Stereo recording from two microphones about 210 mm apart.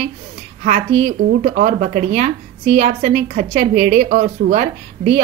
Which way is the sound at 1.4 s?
35° right (ahead or behind).